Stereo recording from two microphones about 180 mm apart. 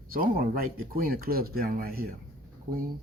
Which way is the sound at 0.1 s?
55° right (ahead or behind).